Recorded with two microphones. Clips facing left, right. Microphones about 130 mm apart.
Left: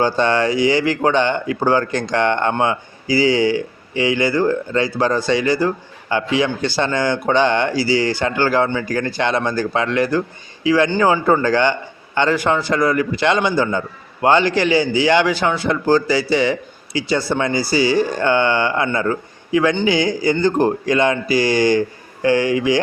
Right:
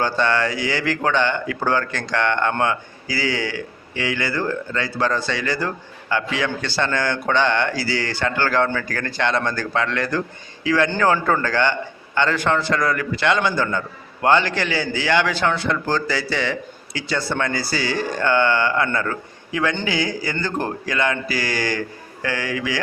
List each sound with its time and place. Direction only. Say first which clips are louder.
0.0 s a man's voice: left 4 dB; 20° left (ahead or behind)